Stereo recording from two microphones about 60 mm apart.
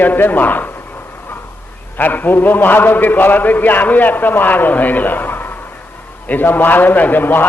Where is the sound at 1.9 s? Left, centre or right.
Left.